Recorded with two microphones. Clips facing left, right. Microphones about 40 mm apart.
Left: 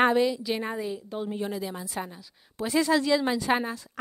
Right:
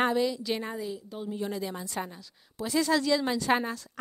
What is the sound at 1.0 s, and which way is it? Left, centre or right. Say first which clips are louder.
Speech: left 4 dB; left.